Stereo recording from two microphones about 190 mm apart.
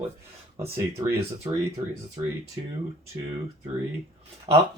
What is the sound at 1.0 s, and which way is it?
Speech, 15° right (ahead or behind).